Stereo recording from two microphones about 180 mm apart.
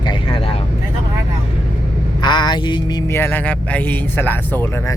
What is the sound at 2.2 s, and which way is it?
Speech, 25° left (ahead or behind).